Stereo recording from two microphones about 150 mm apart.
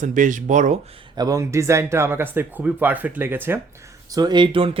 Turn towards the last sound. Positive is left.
turn(degrees=-35)  # may be behind; listen again after turning